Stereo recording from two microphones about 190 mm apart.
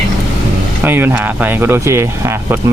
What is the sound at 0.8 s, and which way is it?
Speech, 10° right (ahead or behind).